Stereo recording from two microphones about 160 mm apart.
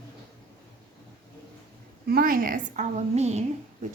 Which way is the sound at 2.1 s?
65° right (ahead or behind).